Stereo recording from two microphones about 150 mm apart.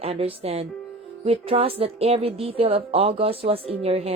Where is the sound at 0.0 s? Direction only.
40° right (ahead or behind).